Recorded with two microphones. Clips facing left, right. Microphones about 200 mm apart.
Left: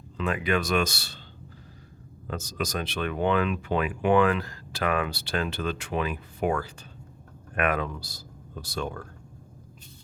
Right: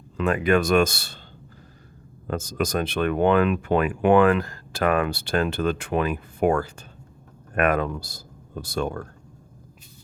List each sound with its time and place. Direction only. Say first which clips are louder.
0.2 s speech: right 6 dB; 50° right (ahead or behind)
2.2 s speech: right 6 dB; 50° right (ahead or behind)